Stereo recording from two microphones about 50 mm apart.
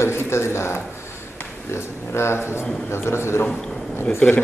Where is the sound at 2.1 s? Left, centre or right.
Left.